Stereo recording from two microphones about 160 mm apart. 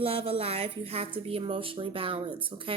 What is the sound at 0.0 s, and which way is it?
A woman's voice, 35° right (ahead or behind).